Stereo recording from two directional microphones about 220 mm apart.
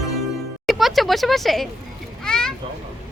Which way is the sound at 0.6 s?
Centre (ahead or behind).